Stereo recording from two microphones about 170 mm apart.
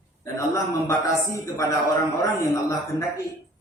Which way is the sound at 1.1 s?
15° left (ahead or behind).